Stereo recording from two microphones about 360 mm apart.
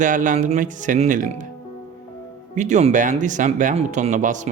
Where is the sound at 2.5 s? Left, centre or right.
Centre.